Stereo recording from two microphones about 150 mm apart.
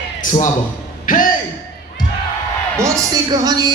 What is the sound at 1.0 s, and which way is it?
Speech, 65° left (ahead or behind).